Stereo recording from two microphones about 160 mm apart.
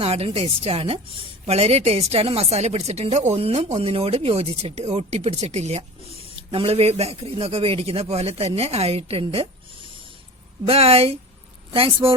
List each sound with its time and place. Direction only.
0.0 s speech: 40° right (ahead or behind)